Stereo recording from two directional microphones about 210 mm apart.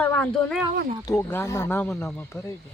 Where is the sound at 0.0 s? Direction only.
5° left (ahead or behind).